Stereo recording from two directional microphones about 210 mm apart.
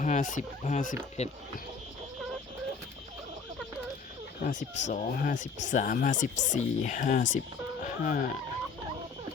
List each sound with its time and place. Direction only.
0.0 s speech: 35° left (ahead or behind)
4.4 s speech: 35° left (ahead or behind)